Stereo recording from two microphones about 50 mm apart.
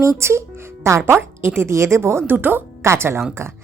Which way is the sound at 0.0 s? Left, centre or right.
Right.